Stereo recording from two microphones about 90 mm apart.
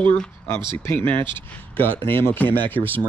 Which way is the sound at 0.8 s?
25° left (ahead or behind).